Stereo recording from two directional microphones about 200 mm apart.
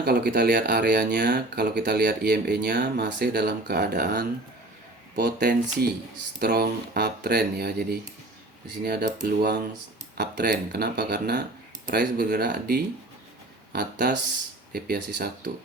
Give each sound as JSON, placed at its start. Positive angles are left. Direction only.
{"t": 0.0, "sound": "speech", "side_deg": -55}
{"t": 14.7, "sound": "speech", "side_deg": -55}